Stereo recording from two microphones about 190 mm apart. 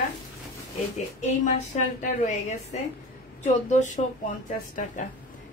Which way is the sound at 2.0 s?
40° left (ahead or behind).